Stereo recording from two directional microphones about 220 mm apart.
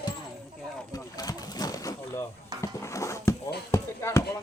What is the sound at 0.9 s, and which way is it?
Boat, 15° left (ahead or behind).